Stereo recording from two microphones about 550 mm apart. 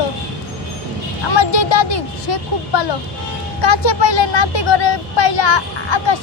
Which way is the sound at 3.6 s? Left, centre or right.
Left.